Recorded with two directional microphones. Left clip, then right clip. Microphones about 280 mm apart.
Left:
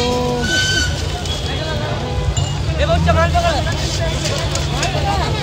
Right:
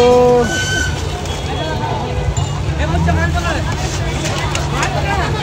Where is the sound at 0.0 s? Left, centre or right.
Centre.